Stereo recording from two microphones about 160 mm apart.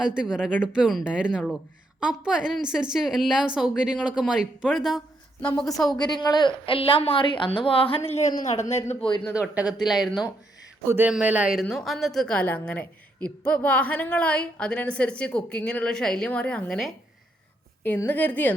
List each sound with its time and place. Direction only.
0.0 s a woman's voice: 5° right (ahead or behind)
6.0 s a woman's voice: 25° left (ahead or behind)
9.3 s a woman's voice: 10° right (ahead or behind); by 18.5 s 10° left (ahead or behind)